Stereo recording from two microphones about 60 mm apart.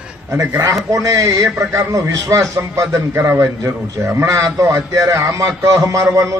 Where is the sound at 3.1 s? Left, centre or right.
Right.